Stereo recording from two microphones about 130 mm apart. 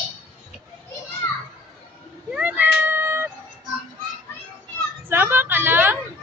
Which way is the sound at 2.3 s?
10° right (ahead or behind).